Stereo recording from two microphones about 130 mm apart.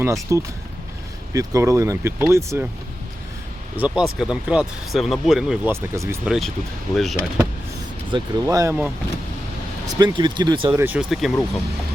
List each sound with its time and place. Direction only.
0.0 s speech: 25° right (ahead or behind)
3.8 s speech: 10° right (ahead or behind)
5.6 s speech: 20° right (ahead or behind)
6.2 s speech: 5° right (ahead or behind)
8.1 s speech: 25° right (ahead or behind)
9.8 s speech: 35° right (ahead or behind)
10.7 s speech: 15° right (ahead or behind)
11.2 s speech: centre (ahead or behind)